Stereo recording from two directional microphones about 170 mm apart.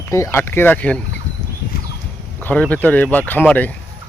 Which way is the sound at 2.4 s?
10° left (ahead or behind).